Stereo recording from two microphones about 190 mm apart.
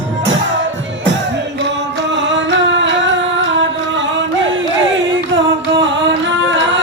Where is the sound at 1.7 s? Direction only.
70° right (ahead or behind).